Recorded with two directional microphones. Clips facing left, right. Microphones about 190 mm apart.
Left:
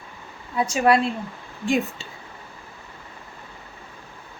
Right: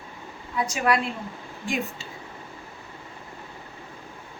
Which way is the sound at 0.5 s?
30° left (ahead or behind).